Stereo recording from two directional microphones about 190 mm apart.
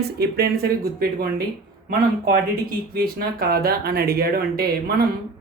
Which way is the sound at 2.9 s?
55° right (ahead or behind).